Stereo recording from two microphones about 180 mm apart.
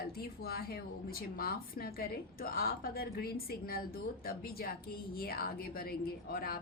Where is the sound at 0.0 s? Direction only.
60° left (ahead or behind).